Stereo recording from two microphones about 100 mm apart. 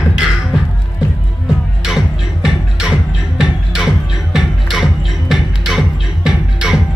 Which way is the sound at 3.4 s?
5° right (ahead or behind).